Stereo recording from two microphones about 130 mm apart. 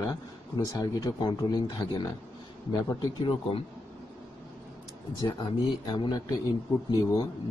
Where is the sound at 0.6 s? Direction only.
30° left (ahead or behind).